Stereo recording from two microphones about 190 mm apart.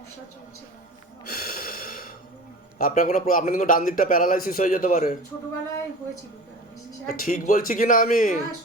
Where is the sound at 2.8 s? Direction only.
45° left (ahead or behind).